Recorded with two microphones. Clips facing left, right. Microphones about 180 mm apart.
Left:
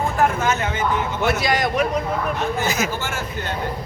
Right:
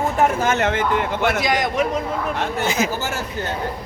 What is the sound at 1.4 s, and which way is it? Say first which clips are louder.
Speech: even; 20° right (ahead or behind).